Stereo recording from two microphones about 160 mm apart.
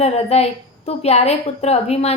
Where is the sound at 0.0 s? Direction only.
40° left (ahead or behind).